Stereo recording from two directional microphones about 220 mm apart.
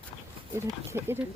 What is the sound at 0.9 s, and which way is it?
Speech, 15° right (ahead or behind).